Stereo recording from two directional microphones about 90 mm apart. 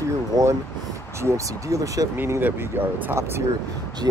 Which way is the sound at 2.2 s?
20° right (ahead or behind).